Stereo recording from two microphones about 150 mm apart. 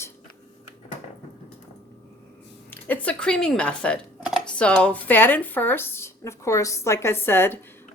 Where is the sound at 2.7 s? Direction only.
10° left (ahead or behind).